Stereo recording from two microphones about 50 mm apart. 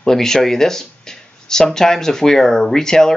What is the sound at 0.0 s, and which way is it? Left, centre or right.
Speech, centre.